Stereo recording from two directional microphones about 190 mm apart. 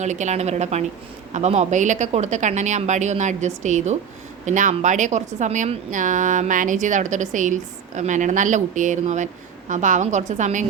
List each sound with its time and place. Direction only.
0.0 s a woman's voice: 40° right (ahead or behind)